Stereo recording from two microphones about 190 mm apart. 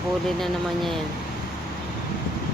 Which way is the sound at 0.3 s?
Centre (ahead or behind).